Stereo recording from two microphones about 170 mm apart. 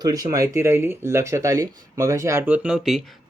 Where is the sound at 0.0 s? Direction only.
20° right (ahead or behind).